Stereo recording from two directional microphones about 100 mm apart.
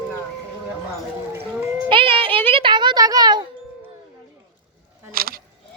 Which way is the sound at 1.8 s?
60° right (ahead or behind).